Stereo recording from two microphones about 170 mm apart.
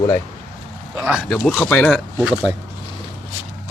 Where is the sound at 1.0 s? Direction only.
5° right (ahead or behind).